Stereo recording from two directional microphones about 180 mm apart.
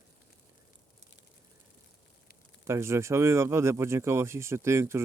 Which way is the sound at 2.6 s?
15° right (ahead or behind).